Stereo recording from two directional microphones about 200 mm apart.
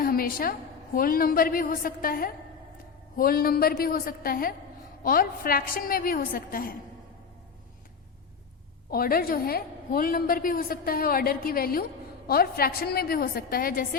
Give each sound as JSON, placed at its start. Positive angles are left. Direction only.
{"t": 0.0, "sound": "a woman's voice", "side_deg": 45}
{"t": 8.9, "sound": "a woman's voice", "side_deg": 50}